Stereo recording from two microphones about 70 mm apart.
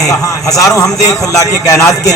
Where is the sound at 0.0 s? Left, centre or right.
Left.